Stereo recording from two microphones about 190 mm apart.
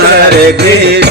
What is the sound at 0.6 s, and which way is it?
Music, 60° right (ahead or behind).